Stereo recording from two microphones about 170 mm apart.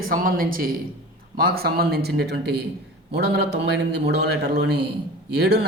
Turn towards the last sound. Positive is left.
turn(degrees=-75)  # may be behind; listen again after turning